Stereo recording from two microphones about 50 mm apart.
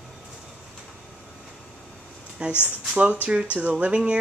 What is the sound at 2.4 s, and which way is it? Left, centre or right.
Speech, right.